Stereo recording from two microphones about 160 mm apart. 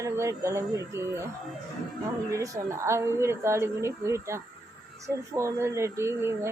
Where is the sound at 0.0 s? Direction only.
20° right (ahead or behind).